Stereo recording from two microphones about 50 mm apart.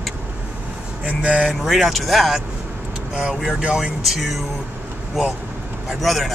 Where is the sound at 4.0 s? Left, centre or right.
Centre.